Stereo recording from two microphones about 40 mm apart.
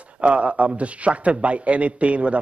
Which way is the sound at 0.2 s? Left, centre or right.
Right.